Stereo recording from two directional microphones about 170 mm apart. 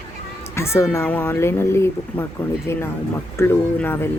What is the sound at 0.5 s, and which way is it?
Speech, 15° left (ahead or behind).